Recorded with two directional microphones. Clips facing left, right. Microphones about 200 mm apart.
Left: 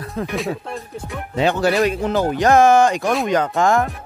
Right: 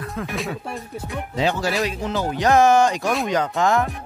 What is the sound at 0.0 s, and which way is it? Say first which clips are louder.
Music: left 3 dB; 35° left (ahead or behind).